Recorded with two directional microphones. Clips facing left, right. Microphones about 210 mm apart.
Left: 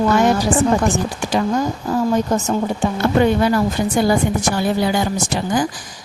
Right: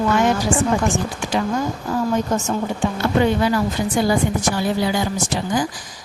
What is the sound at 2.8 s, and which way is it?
Speech, 50° left (ahead or behind).